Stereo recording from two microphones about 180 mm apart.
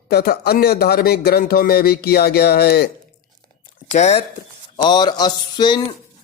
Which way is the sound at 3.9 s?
35° left (ahead or behind).